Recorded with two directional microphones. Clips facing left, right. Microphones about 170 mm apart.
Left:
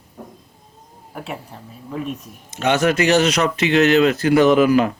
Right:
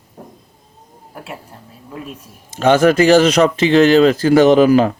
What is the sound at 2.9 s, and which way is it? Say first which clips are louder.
Speech: right 5 dB; 30° right (ahead or behind).